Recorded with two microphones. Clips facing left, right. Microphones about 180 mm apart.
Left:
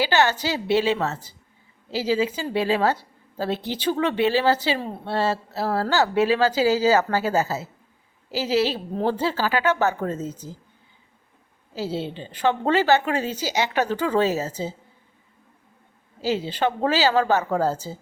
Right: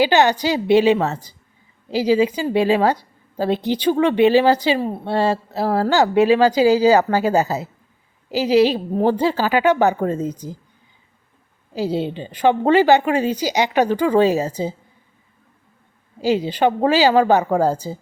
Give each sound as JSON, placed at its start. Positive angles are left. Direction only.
{"t": 0.0, "sound": "a woman's voice", "side_deg": -20}
{"t": 11.7, "sound": "a woman's voice", "side_deg": -15}
{"t": 16.2, "sound": "a woman's voice", "side_deg": -15}